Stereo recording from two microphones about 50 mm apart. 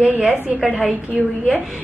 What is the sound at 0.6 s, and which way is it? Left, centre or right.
Speech, centre.